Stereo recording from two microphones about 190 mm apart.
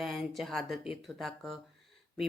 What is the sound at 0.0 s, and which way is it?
Speech, centre (ahead or behind).